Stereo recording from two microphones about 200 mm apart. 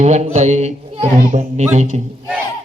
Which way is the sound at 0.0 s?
35° right (ahead or behind).